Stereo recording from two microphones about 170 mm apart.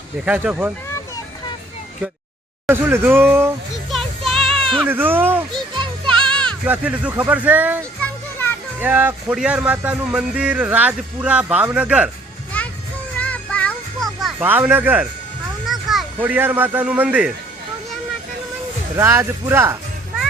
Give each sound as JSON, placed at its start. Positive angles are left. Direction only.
{"t": 0.3, "sound": "a man's voice", "side_deg": -10}
{"t": 0.9, "sound": "a sound", "side_deg": 20}
{"t": 2.6, "sound": "a man's voice", "side_deg": -15}
{"t": 4.3, "sound": "music", "side_deg": 0}
{"t": 4.9, "sound": "a man's voice", "side_deg": -10}
{"t": 6.1, "sound": "a sound", "side_deg": 5}
{"t": 6.7, "sound": "a man's voice", "side_deg": -10}
{"t": 8.0, "sound": "children playing", "side_deg": 10}
{"t": 8.8, "sound": "a man's voice", "side_deg": -10}
{"t": 12.5, "sound": "music", "side_deg": 10}
{"t": 14.3, "sound": "a man's voice", "side_deg": -10}
{"t": 18.9, "sound": "a man's voice", "side_deg": -15}